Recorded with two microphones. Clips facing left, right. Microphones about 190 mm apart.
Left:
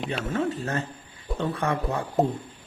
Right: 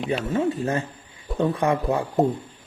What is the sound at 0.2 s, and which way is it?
Speech, 10° right (ahead or behind).